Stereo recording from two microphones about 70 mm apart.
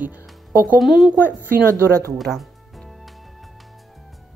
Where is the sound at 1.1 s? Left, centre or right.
Right.